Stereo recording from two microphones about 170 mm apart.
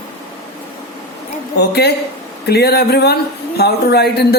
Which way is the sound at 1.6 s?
70° left (ahead or behind).